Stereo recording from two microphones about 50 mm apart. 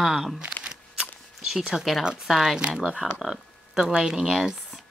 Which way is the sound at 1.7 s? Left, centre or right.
Centre.